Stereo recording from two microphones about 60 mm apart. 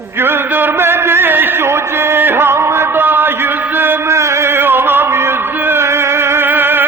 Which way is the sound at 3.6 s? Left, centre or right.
Right.